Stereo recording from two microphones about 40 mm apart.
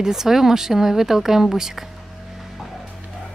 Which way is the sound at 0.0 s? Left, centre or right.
Centre.